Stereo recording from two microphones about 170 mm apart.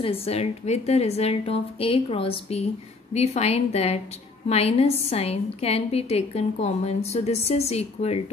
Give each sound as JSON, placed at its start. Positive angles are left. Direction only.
{"t": 0.0, "sound": "a woman's voice", "side_deg": 35}